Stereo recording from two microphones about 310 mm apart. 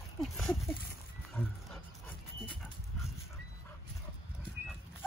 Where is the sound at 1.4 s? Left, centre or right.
Centre.